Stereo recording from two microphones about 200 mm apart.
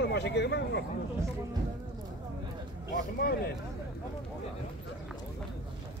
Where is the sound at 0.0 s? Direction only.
60° left (ahead or behind).